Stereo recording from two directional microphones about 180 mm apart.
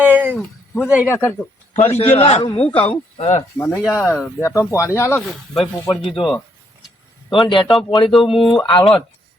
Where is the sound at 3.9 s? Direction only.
15° left (ahead or behind).